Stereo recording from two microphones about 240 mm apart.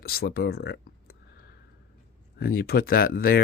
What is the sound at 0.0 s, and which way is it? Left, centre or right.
Speech, left.